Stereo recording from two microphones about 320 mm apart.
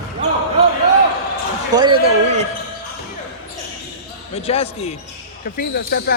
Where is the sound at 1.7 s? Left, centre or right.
Centre.